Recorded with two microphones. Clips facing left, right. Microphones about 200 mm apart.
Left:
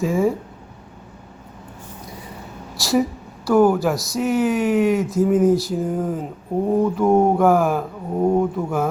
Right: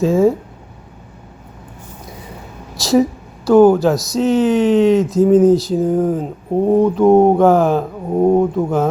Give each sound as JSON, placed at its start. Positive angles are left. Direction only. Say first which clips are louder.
{"t": 0.0, "sound": "speech", "louder": "right 6 dB", "side_deg": -25}
{"t": 2.7, "sound": "a woman's voice", "louder": "right 6 dB", "side_deg": -20}